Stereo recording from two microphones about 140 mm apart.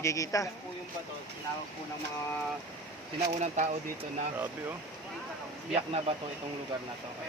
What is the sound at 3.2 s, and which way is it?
Speech, 50° right (ahead or behind).